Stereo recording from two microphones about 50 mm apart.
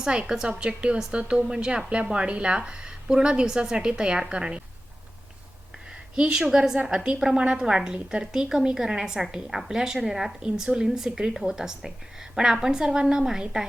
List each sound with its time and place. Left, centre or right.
0.0 s speech: centre
5.9 s a woman's voice: centre